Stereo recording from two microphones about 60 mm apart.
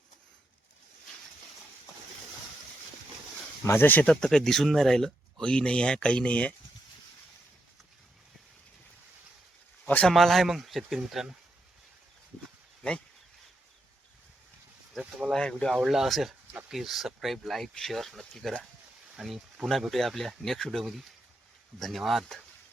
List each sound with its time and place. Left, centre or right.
3.6 s speech: left
4.0 s speech: centre
9.8 s a sound: left
10.1 s speech: centre
15.3 s speech: centre
15.9 s speech: centre